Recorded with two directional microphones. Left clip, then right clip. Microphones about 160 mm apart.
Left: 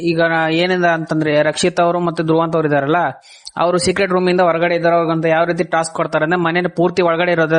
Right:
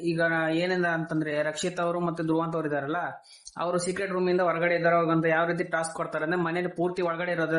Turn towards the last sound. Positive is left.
turn(degrees=60)  # may be behind; listen again after turning